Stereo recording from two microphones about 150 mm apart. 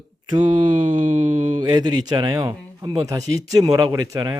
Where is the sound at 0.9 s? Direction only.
55° right (ahead or behind).